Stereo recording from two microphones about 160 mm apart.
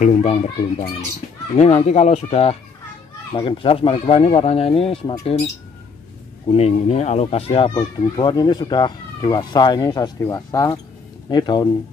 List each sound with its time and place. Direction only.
0.0 s a child's voice: 45° left (ahead or behind)
6.5 s speech: 40° left (ahead or behind)